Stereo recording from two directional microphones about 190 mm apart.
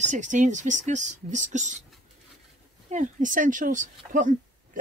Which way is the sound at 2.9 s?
45° right (ahead or behind).